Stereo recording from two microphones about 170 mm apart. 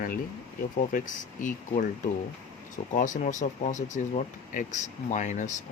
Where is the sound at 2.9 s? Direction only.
50° left (ahead or behind).